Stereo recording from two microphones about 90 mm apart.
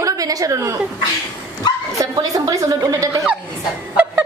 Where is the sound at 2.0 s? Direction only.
40° right (ahead or behind).